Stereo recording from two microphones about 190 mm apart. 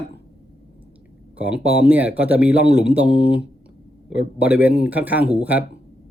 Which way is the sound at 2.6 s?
60° left (ahead or behind).